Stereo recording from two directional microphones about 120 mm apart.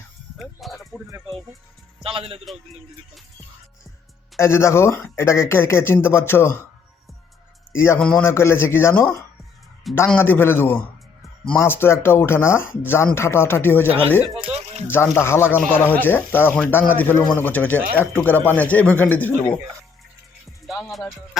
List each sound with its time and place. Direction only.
0.3 s speech: centre (ahead or behind)
2.0 s a man's voice: 50° right (ahead or behind)
4.4 s speech: 20° left (ahead or behind)
7.7 s speech: 20° left (ahead or behind)
7.9 s speech: 5° left (ahead or behind)
8.2 s speech: 20° left (ahead or behind)
10.2 s speech: 15° left (ahead or behind)
14.4 s music: 60° right (ahead or behind)
14.8 s speech: 20° left (ahead or behind)
20.7 s music: centre (ahead or behind)